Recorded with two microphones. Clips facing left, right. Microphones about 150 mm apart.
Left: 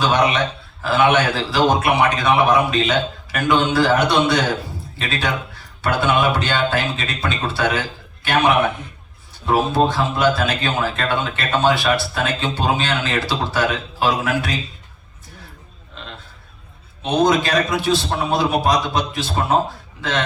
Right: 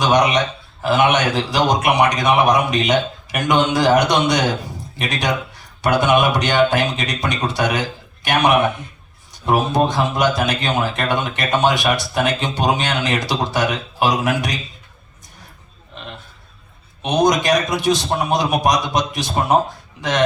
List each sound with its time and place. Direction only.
0.0 s a man's voice: 15° right (ahead or behind)
17.0 s a man's voice: 15° right (ahead or behind)